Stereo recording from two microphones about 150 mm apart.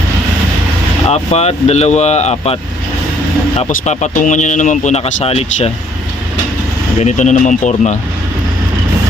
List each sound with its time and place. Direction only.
1.1 s speech: 45° left (ahead or behind)
3.7 s speech: 55° left (ahead or behind)
7.0 s speech: 55° left (ahead or behind)